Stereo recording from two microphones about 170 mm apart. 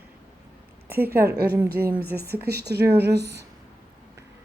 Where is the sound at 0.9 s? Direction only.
10° right (ahead or behind).